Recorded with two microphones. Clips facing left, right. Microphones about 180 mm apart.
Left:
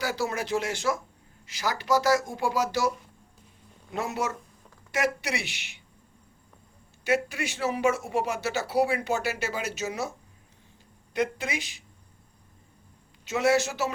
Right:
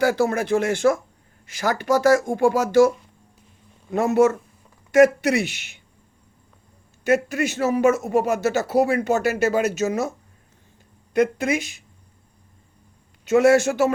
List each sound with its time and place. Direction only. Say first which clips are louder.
0.0 s speech: right 10 dB; 55° right (ahead or behind)
3.9 s speech: right 13 dB; 50° right (ahead or behind)
7.0 s speech: right 7 dB; 45° right (ahead or behind)
13.2 s speech: right 8 dB; 50° right (ahead or behind)